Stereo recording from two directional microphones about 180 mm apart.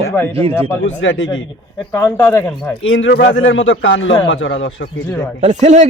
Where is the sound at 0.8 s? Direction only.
90° left.